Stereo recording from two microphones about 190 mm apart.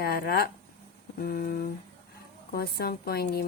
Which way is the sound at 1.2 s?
50° left (ahead or behind).